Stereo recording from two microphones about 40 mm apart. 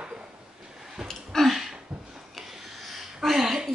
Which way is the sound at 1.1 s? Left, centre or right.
Centre.